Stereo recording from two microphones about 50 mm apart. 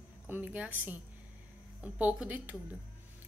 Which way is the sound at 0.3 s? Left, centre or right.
Right.